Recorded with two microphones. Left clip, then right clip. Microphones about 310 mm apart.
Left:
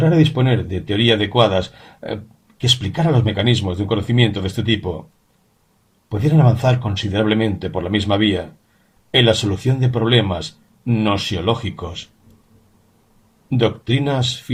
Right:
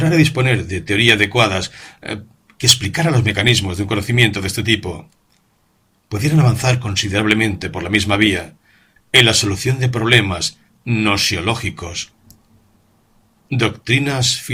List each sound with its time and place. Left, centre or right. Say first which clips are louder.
0.0 s speech: right 1 dB; right
2.8 s speech: right 2 dB; right
6.1 s speech: left 1 dB; right
13.5 s speech: right 1 dB; right